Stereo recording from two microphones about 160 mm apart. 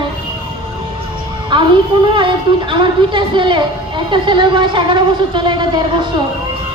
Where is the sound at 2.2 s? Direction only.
30° right (ahead or behind).